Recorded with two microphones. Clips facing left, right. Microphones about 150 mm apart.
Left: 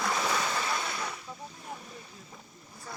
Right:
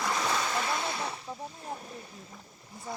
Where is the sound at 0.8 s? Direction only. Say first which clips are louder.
Right 2 dB; 25° right (ahead or behind).